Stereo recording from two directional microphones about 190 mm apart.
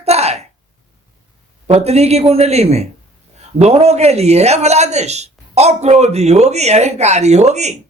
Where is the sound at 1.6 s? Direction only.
35° right (ahead or behind).